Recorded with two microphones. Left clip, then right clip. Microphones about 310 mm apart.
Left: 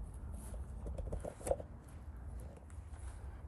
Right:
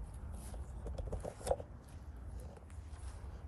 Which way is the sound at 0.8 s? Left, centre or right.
Centre.